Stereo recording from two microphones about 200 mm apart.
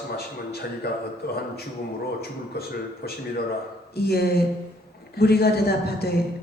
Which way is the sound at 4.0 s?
50° left (ahead or behind).